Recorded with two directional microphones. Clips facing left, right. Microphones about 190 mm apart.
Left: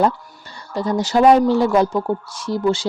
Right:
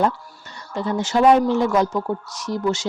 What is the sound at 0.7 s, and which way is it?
Speech, 40° left (ahead or behind).